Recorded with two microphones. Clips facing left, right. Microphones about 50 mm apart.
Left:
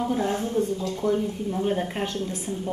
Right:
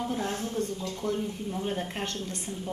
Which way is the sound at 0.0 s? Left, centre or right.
Left.